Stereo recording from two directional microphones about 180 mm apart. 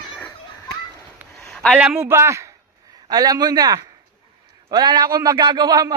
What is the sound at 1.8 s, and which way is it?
A man's voice, 10° right (ahead or behind).